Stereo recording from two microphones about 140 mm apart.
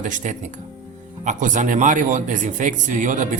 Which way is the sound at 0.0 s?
65° right (ahead or behind).